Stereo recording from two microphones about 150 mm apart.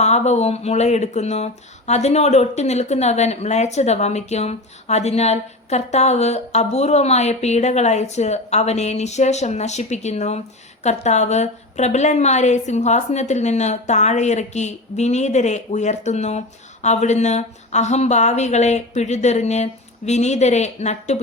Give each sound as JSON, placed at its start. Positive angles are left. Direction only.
{"t": 0.0, "sound": "speech", "side_deg": 50}